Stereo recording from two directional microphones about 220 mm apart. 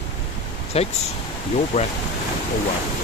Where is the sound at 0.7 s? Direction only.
30° left (ahead or behind).